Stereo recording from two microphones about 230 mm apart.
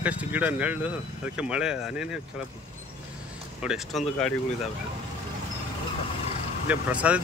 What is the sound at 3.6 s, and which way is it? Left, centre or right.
Speech, centre.